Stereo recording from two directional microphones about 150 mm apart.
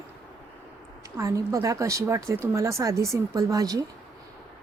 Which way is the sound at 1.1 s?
20° right (ahead or behind).